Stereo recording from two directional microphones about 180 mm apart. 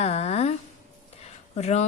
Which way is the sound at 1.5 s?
40° left (ahead or behind).